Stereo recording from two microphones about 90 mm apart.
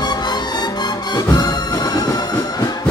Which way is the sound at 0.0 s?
50° left (ahead or behind).